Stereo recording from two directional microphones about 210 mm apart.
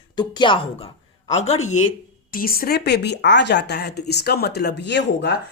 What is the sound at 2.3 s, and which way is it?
Speech, 45° left (ahead or behind).